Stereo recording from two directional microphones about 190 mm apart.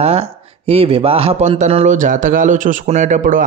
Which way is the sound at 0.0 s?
30° right (ahead or behind).